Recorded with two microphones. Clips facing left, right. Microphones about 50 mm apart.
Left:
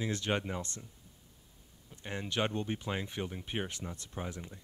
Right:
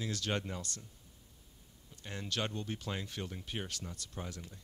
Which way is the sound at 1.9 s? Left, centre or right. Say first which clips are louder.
Left 4 dB; left.